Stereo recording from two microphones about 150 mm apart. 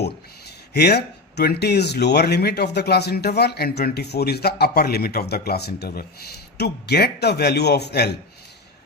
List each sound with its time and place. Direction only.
0.0 s speech: 90° left